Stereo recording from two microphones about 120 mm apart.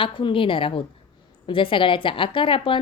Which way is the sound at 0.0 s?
45° left (ahead or behind).